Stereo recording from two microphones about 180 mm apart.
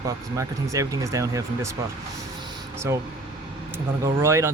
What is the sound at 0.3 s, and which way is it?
Speech, 20° right (ahead or behind).